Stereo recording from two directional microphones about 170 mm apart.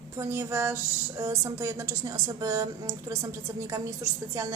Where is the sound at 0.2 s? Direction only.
15° right (ahead or behind).